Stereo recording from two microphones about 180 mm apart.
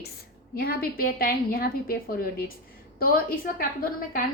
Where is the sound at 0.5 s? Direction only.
55° left (ahead or behind).